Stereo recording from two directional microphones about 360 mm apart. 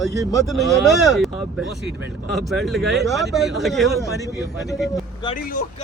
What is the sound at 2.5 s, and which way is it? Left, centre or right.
Speech, centre.